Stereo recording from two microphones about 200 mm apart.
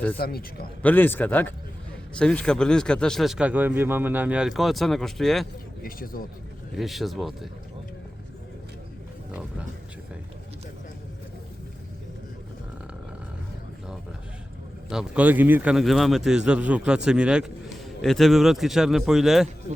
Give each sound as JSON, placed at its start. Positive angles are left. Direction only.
{"t": 0.2, "sound": "a man's voice", "side_deg": 50}
{"t": 0.8, "sound": "a man's voice", "side_deg": 10}
{"t": 5.8, "sound": "a man's voice", "side_deg": 45}
{"t": 6.7, "sound": "a man's voice", "side_deg": 0}
{"t": 14.8, "sound": "a man's voice", "side_deg": -5}